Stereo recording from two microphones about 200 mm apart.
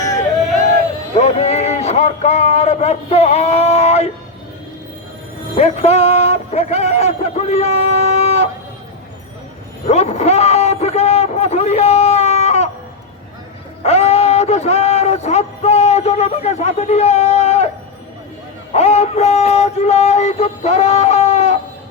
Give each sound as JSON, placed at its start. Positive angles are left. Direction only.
{"t": 1.1, "sound": "speech", "side_deg": 35}
{"t": 5.5, "sound": "a man's voice", "side_deg": 35}
{"t": 9.8, "sound": "a man's voice", "side_deg": 35}
{"t": 13.8, "sound": "speech", "side_deg": 30}
{"t": 18.7, "sound": "speech", "side_deg": 35}